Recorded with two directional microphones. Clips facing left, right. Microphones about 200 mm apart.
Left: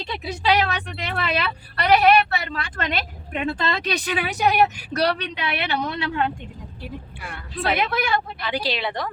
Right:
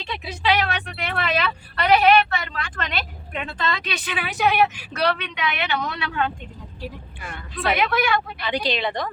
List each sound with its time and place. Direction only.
0.3 s a woman's voice: 40° left (ahead or behind); by 6.3 s 20° left (ahead or behind)
7.2 s a woman's voice: 5° left (ahead or behind)
7.5 s a woman's voice: 35° left (ahead or behind)
8.4 s a woman's voice: 5° left (ahead or behind)